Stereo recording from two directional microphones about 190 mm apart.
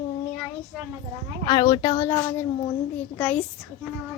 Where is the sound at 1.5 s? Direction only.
25° left (ahead or behind); by 3.4 s 5° left (ahead or behind).